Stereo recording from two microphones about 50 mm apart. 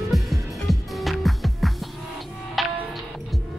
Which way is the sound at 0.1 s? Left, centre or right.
Centre.